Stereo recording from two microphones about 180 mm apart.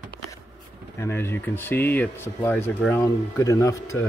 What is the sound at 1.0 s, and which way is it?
Speech, 15° left (ahead or behind).